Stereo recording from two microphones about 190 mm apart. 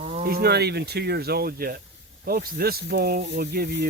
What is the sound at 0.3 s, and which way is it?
Speech, 55° right (ahead or behind).